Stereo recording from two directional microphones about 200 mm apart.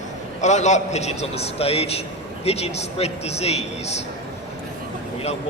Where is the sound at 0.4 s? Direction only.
35° left (ahead or behind).